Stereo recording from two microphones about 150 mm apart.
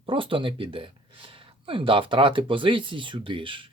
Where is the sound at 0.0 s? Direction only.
35° right (ahead or behind).